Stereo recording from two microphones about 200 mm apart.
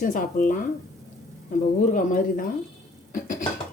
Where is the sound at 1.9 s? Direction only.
40° left (ahead or behind).